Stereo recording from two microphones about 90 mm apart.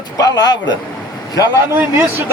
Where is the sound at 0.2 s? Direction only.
45° left (ahead or behind).